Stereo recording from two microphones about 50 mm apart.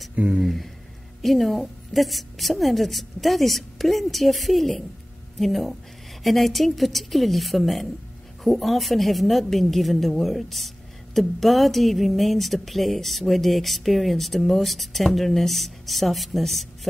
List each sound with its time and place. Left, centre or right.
0.1 s speech: right
1.2 s a woman's voice: centre